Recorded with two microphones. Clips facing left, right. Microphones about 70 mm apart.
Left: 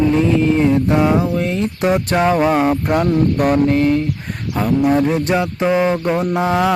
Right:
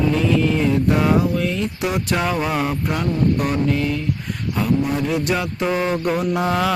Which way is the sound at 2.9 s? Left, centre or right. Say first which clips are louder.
Left 5 dB; left.